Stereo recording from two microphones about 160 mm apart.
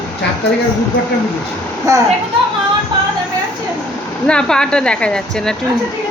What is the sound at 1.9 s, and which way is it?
Speech, 20° right (ahead or behind).